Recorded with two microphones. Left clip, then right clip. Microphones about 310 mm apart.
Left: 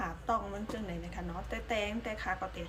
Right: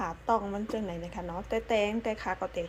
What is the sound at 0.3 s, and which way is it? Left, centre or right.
A woman's voice, centre.